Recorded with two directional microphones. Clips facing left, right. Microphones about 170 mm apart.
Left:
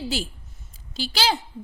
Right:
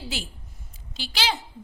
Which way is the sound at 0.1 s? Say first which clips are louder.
Left 6 dB; 35° left (ahead or behind).